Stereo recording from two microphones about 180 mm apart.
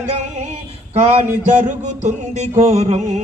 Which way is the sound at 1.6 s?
40° right (ahead or behind).